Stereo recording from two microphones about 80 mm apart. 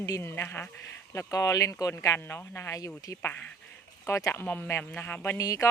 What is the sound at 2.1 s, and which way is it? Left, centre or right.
Speech, left.